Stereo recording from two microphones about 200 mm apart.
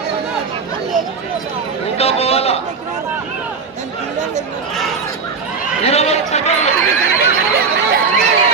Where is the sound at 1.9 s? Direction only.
30° left (ahead or behind).